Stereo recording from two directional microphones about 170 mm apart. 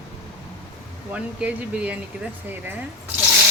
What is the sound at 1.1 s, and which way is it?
Speech, 10° right (ahead or behind).